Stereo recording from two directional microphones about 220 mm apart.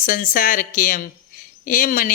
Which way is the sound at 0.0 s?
40° left (ahead or behind).